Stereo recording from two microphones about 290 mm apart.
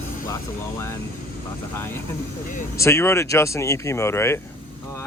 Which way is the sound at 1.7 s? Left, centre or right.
Centre.